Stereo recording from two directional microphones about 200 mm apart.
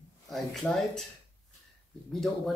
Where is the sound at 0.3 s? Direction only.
Centre (ahead or behind).